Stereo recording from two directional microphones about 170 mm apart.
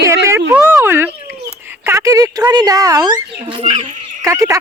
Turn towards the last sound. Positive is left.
turn(degrees=-20)  # may be behind; listen again after turning